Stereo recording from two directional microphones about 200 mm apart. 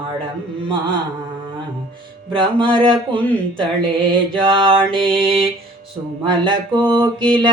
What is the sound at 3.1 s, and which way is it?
Speech, 5° left (ahead or behind).